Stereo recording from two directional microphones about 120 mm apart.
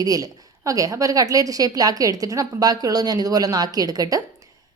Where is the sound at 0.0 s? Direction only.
30° right (ahead or behind).